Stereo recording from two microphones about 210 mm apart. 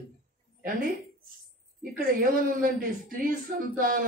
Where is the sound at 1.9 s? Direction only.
40° right (ahead or behind).